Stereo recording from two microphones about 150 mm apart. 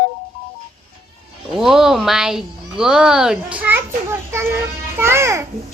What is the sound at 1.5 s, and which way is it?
A child's voice, centre (ahead or behind).